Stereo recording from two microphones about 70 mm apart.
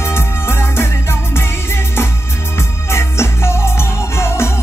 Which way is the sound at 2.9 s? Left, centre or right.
Left.